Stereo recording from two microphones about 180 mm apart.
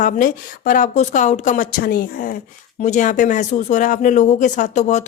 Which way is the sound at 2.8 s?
45° left (ahead or behind).